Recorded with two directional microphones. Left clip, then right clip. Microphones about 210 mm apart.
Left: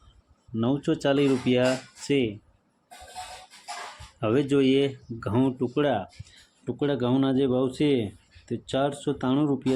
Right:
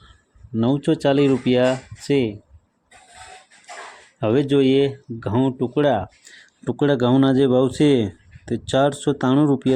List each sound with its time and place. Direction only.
0.5 s speech: 25° right (ahead or behind)
4.2 s speech: 20° right (ahead or behind)